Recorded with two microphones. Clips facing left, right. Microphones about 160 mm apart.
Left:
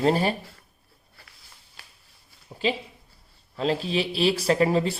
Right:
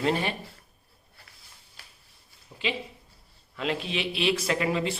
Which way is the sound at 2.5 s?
40° left (ahead or behind).